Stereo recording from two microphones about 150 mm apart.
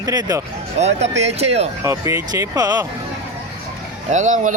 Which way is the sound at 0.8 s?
45° right (ahead or behind).